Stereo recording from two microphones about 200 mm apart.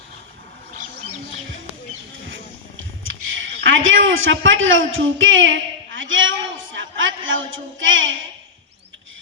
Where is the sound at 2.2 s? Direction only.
70° right (ahead or behind).